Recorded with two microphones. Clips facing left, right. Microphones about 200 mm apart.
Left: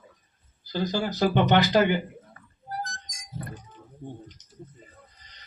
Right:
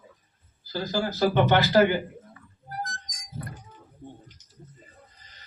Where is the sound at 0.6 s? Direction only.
20° left (ahead or behind).